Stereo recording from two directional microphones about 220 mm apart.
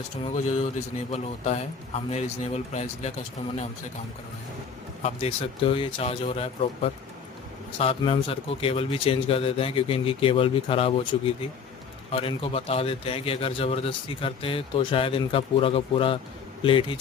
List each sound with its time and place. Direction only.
0.3 s a man's voice: 30° left (ahead or behind)
5.0 s a man's voice: 25° left (ahead or behind)